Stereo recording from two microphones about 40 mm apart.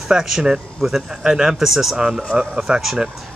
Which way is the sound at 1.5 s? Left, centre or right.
Centre.